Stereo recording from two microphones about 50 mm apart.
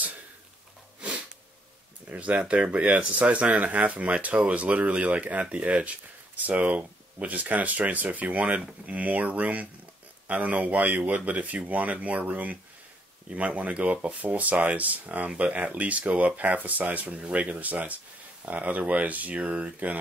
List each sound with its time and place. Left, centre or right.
2.0 s speech: right